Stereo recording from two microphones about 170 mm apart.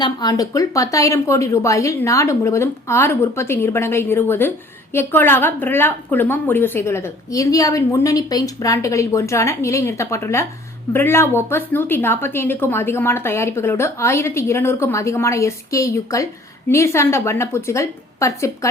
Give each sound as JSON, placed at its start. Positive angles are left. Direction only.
{"t": 0.0, "sound": "a woman's voice", "side_deg": 25}